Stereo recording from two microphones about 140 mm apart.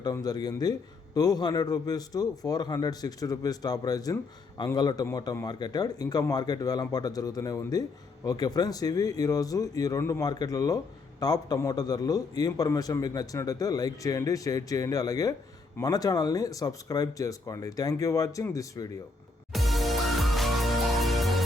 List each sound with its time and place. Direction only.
0.0 s speech: 25° left (ahead or behind)
19.5 s music: centre (ahead or behind)